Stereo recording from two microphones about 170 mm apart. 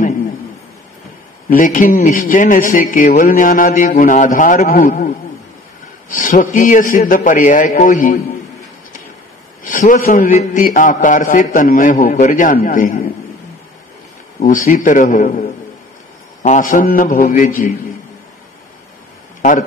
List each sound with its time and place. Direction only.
1.5 s a man's voice: 50° left (ahead or behind)
9.6 s a man's voice: 50° left (ahead or behind)
14.4 s a man's voice: 50° left (ahead or behind)
16.4 s a man's voice: 50° left (ahead or behind)